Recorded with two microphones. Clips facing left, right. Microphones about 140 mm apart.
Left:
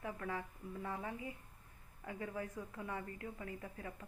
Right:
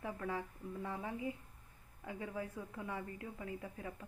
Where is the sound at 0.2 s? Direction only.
15° right (ahead or behind).